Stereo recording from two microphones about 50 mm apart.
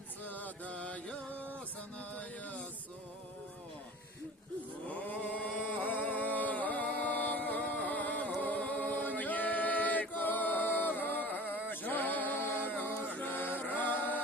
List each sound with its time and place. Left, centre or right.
0.3 s mantra: left
2.1 s music: left
4.9 s a sound: left
8.4 s a capella: left
11.3 s a sound: left
11.7 s a capella: left